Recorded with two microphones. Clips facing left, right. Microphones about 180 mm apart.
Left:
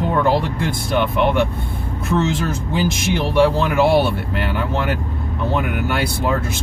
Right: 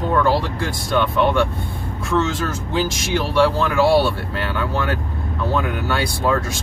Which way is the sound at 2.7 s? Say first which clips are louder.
Left 1 dB; 20° left (ahead or behind).